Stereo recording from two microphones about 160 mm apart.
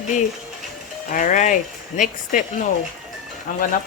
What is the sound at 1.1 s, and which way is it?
Speech, 55° left (ahead or behind).